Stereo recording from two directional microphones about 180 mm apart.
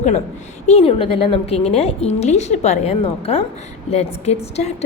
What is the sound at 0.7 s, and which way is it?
A woman's voice, 35° left (ahead or behind).